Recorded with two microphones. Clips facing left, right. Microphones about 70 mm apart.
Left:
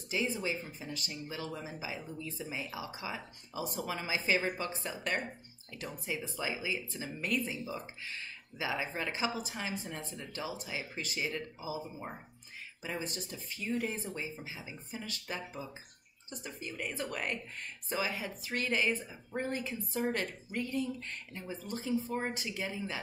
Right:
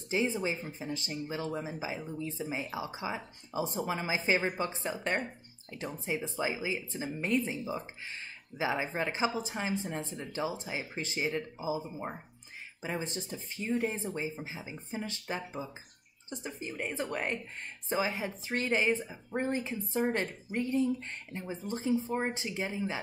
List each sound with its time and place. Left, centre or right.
0.1 s speech: right